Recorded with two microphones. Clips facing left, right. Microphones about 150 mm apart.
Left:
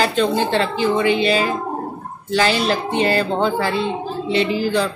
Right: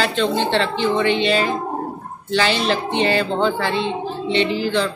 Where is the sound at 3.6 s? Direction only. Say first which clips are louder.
Left 1 dB; 40° left (ahead or behind).